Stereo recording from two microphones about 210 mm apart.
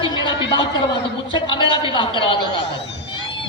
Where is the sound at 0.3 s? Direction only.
25° left (ahead or behind).